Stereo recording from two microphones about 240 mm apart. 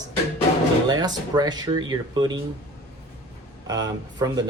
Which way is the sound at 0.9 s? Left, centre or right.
Centre.